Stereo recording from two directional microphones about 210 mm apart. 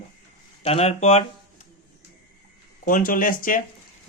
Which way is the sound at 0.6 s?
30° left (ahead or behind).